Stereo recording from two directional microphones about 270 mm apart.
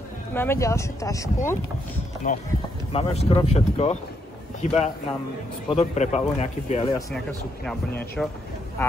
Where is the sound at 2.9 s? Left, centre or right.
Left.